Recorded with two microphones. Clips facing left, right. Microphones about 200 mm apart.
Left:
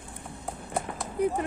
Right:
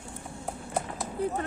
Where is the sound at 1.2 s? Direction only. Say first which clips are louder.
Left 4 dB; 15° left (ahead or behind).